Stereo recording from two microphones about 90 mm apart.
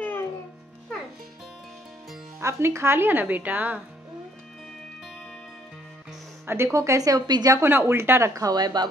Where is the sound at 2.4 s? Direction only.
30° right (ahead or behind).